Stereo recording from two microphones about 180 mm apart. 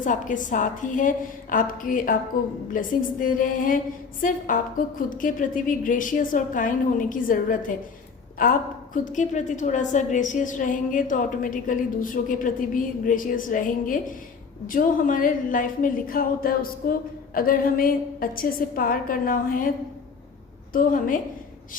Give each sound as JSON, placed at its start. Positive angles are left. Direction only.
{"t": 0.0, "sound": "a woman's voice", "side_deg": 45}
{"t": 20.7, "sound": "a woman's voice", "side_deg": 50}